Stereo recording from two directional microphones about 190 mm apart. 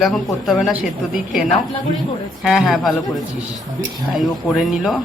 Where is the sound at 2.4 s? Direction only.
Centre (ahead or behind).